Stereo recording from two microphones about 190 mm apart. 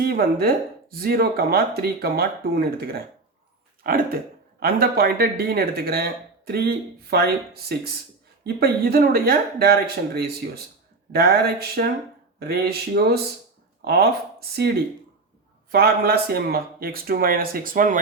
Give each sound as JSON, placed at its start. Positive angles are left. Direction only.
{"t": 0.0, "sound": "speech", "side_deg": -55}